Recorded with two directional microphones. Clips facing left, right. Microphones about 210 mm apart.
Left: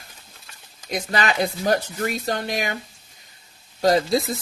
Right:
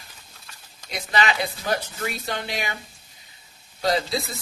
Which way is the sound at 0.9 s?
45° left (ahead or behind).